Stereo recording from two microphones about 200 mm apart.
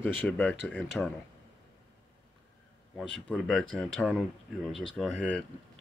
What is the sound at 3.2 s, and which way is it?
Speech, centre (ahead or behind).